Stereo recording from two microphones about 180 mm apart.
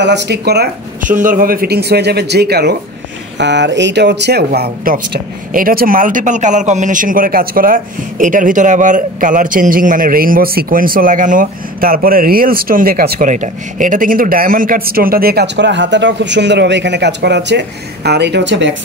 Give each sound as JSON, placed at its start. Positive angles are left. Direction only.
{"t": 0.0, "sound": "speech", "side_deg": -70}
{"t": 1.0, "sound": "speech", "side_deg": -45}
{"t": 3.3, "sound": "speech", "side_deg": -75}
{"t": 13.3, "sound": "speech", "side_deg": -45}